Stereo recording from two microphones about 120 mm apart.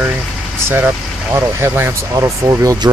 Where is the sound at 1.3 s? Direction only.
20° right (ahead or behind).